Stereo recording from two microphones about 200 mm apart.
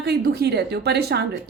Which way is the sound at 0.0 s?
55° right (ahead or behind).